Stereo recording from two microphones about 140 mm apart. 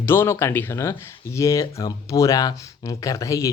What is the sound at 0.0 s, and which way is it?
Speech, 15° left (ahead or behind).